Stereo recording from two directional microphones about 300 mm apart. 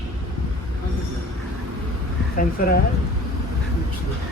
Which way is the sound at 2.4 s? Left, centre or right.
Left.